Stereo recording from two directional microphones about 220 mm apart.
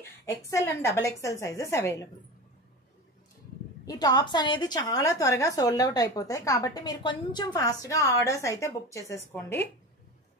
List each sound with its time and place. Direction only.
0.2 s a woman's voice: 15° left (ahead or behind)
3.8 s a woman's voice: 15° left (ahead or behind)